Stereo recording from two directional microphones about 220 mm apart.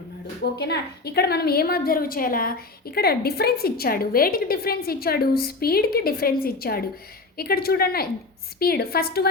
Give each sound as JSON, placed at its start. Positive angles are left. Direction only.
{"t": 0.6, "sound": "a woman's voice", "side_deg": 50}